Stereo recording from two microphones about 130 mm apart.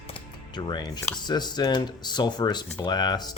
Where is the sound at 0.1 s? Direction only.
35° left (ahead or behind).